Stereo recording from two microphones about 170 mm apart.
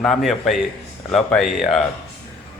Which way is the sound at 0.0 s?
Centre (ahead or behind).